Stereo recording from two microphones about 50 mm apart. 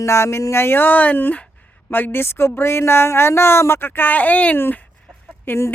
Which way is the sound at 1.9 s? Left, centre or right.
Left.